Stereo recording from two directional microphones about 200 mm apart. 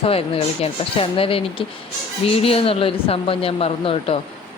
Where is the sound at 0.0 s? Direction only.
30° left (ahead or behind).